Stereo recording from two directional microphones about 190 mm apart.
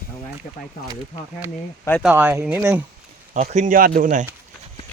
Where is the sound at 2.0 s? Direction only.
10° right (ahead or behind).